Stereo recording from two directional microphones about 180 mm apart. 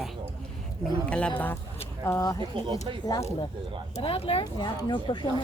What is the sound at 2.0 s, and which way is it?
Speech, 15° left (ahead or behind).